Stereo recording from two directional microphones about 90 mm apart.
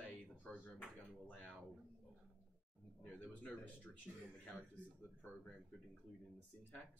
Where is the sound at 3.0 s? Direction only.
20° left (ahead or behind).